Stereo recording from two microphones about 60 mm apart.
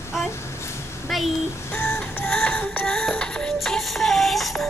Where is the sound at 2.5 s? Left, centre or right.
Left.